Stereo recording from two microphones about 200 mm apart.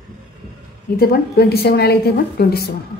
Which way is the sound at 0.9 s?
50° left (ahead or behind).